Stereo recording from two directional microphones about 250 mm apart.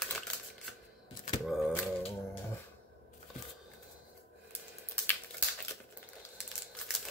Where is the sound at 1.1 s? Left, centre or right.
Left.